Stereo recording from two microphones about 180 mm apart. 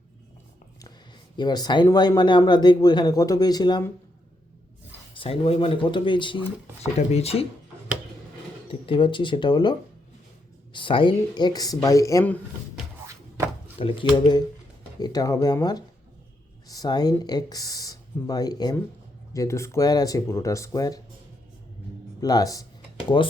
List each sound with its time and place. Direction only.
1.4 s speech: 20° left (ahead or behind)
5.1 s speech: 30° left (ahead or behind)
8.9 s speech: 30° left (ahead or behind); by 12.8 s 10° left (ahead or behind)
13.7 s speech: 30° left (ahead or behind)
22.2 s speech: 20° left (ahead or behind)